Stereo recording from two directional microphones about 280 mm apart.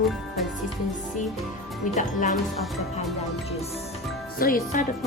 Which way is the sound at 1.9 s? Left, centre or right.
Left.